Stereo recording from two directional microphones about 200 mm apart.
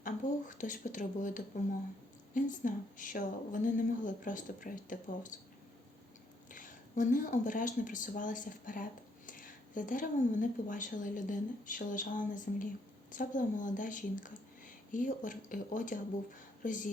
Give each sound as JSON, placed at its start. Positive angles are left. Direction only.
{"t": 0.0, "sound": "speech", "side_deg": 40}
{"t": 6.5, "sound": "speech", "side_deg": 40}